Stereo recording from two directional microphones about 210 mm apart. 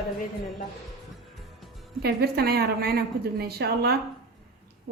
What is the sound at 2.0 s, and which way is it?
A woman's voice, 50° right (ahead or behind).